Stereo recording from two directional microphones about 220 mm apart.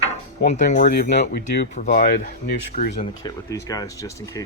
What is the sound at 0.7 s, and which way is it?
Speech, 40° left (ahead or behind).